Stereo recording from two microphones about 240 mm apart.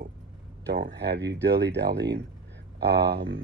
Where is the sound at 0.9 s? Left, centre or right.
Right.